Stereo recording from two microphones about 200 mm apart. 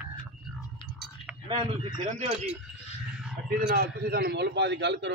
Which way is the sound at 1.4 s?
25° right (ahead or behind).